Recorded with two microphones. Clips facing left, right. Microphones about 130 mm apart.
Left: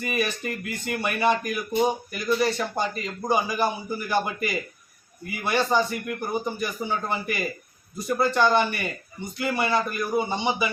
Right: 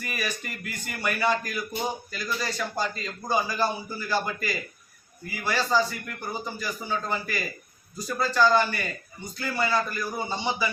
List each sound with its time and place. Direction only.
0.0 s speech: 20° left (ahead or behind)